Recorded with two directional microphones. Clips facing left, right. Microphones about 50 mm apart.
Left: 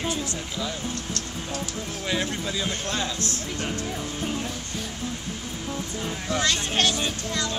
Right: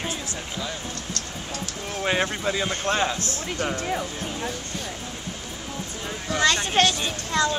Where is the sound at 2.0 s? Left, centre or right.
Right.